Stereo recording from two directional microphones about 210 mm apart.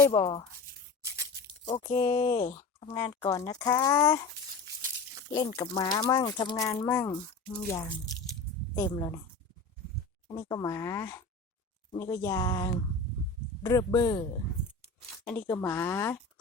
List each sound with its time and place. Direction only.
0.1 s speech: 25° left (ahead or behind)
1.8 s speech: 15° left (ahead or behind)
5.3 s speech: 15° left (ahead or behind)
10.3 s speech: 15° left (ahead or behind)
15.3 s speech: 10° left (ahead or behind)